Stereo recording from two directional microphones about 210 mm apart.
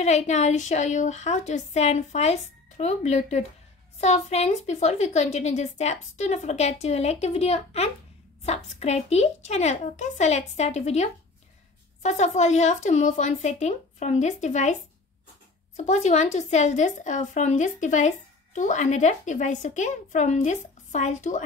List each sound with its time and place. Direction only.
0.0 s a woman's voice: 35° left (ahead or behind)